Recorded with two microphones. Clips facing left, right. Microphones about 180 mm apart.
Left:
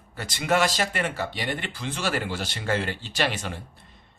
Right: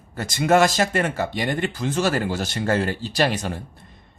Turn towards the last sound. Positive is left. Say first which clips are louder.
# right 5 dB
turn(degrees=-40)  # may be behind; listen again after turning